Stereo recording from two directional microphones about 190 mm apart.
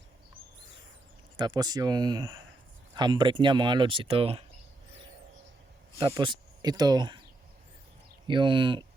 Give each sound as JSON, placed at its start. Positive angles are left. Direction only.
{"t": 1.4, "sound": "speech", "side_deg": -20}
{"t": 6.0, "sound": "speech", "side_deg": -25}
{"t": 8.3, "sound": "speech", "side_deg": -25}